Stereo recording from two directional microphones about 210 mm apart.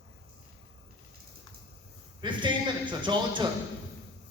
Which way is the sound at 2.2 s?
20° right (ahead or behind).